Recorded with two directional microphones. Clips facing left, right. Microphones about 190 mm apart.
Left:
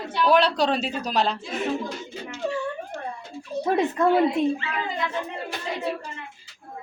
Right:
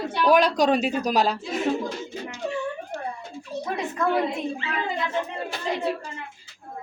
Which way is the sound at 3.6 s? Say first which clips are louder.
Left 7 dB; 30° left (ahead or behind).